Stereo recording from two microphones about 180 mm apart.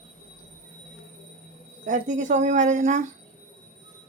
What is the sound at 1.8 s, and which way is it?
Speech, 45° right (ahead or behind).